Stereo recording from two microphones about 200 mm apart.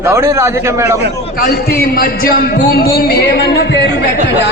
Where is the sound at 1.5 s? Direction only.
50° left (ahead or behind).